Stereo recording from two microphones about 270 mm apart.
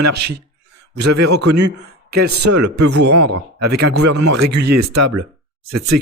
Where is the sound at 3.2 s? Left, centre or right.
Right.